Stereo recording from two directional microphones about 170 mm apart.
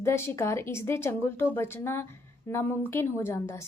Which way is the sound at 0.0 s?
15° left (ahead or behind).